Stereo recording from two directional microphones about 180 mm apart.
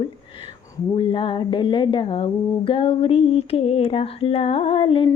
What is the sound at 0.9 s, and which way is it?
Speech, 30° left (ahead or behind).